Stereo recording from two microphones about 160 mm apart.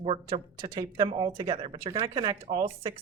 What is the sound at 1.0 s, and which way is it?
Speech, 35° right (ahead or behind).